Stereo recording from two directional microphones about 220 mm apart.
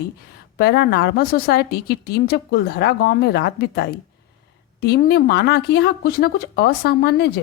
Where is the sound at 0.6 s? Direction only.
45° left (ahead or behind).